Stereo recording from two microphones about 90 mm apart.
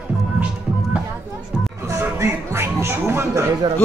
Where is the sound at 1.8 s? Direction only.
30° right (ahead or behind).